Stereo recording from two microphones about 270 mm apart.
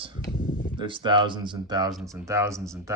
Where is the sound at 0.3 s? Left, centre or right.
Left.